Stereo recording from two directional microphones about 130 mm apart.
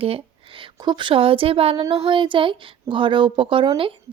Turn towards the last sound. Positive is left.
turn(degrees=-40)  # may be behind; listen again after turning